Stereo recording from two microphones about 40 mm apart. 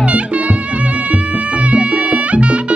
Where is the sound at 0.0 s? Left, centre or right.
Right.